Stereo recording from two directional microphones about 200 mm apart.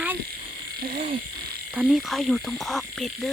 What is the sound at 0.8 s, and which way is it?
Frog, 50° right (ahead or behind).